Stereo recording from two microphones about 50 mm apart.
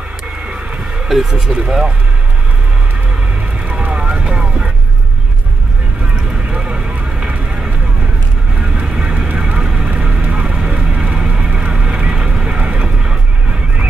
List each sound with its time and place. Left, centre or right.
1.0 s speech: centre
3.8 s vehicle: right
6.3 s vehicle: right
13.0 s music: centre